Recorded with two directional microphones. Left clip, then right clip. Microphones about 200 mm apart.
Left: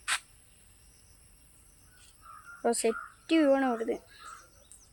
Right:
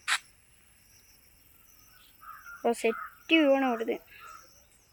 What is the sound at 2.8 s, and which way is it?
Speech, centre (ahead or behind).